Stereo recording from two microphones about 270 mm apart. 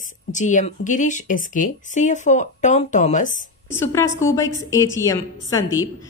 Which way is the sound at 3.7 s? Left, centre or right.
Centre.